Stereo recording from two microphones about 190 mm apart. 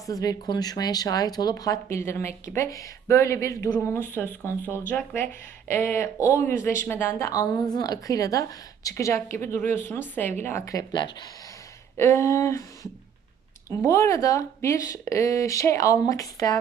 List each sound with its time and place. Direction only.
0.1 s speech: 20° left (ahead or behind)